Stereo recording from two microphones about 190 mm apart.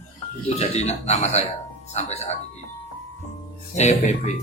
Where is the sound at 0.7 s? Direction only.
35° left (ahead or behind).